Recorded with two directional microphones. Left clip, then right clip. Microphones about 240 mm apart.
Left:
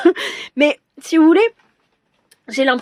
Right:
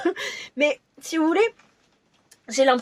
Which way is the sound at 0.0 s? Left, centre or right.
Left.